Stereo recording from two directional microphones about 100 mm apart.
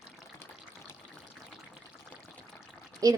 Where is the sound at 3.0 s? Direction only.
35° right (ahead or behind).